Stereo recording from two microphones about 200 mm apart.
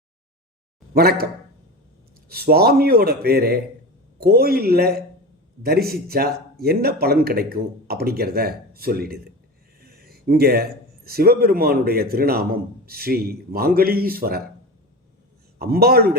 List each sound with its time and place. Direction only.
0.9 s speech: 50° right (ahead or behind)
2.3 s speech: 50° right (ahead or behind)
15.5 s speech: 50° right (ahead or behind)